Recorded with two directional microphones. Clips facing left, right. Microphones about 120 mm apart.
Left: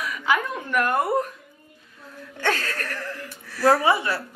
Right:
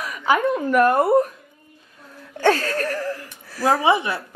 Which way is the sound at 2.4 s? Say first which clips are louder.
Right 7 dB; 35° right (ahead or behind).